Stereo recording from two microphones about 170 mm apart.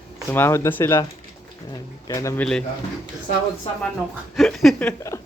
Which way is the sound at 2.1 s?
15° left (ahead or behind).